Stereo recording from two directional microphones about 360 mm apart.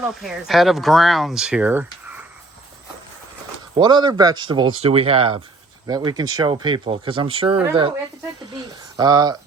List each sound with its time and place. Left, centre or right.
0.1 s speech: centre
3.8 s speech: centre
8.5 s a sound: centre